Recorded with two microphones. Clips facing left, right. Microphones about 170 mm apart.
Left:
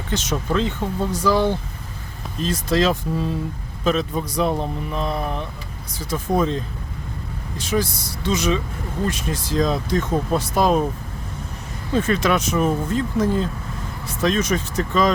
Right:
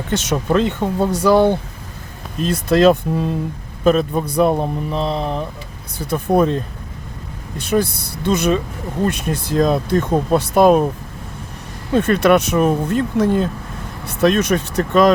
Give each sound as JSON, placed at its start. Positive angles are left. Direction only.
{"t": 0.1, "sound": "a man's voice", "side_deg": -65}
{"t": 4.9, "sound": "mantra", "side_deg": -30}
{"t": 6.0, "sound": "speech", "side_deg": -60}
{"t": 7.6, "sound": "speech", "side_deg": -60}
{"t": 11.9, "sound": "speech", "side_deg": -60}